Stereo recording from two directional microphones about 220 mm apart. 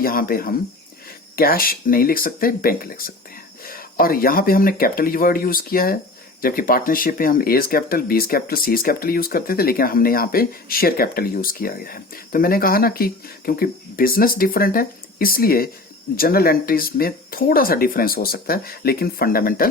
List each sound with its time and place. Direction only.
0.0 s speech: 40° left (ahead or behind)